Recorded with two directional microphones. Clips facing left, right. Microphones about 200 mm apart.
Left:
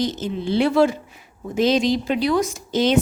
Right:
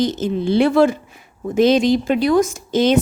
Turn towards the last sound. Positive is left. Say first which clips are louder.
# right 3 dB
turn(degrees=-50)  # may be behind; listen again after turning